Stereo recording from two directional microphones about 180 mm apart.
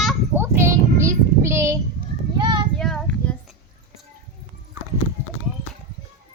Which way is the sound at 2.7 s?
5° left (ahead or behind).